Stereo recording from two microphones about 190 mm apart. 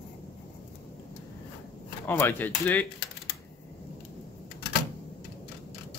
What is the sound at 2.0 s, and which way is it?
Speech, 10° left (ahead or behind).